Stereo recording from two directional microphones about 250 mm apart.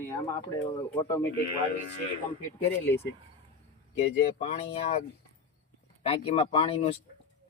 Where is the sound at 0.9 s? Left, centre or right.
Centre.